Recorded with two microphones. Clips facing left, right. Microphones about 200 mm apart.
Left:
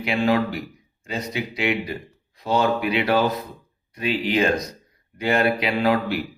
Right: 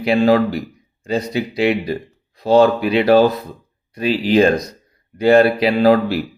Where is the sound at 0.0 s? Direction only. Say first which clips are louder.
Right 7 dB; 40° right (ahead or behind).